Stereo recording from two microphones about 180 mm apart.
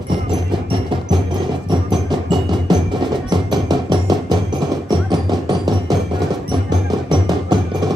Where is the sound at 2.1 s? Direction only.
25° right (ahead or behind).